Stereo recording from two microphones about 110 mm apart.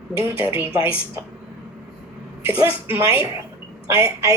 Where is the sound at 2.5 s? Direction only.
55° left (ahead or behind).